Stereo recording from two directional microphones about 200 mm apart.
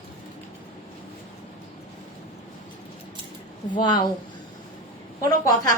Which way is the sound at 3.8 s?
20° left (ahead or behind).